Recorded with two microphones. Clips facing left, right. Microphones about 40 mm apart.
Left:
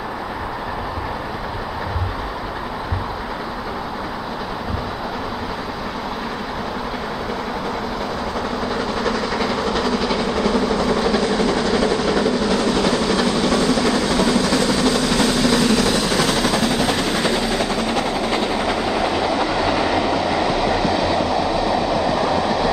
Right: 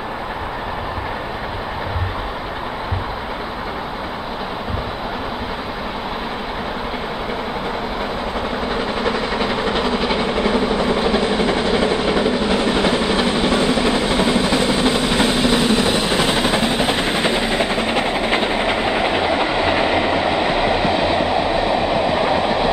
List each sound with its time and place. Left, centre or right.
8.7 s vehicle: right